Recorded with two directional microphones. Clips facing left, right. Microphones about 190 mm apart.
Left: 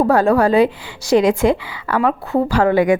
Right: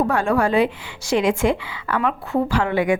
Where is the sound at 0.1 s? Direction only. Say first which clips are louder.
Left 5 dB; 35° left (ahead or behind).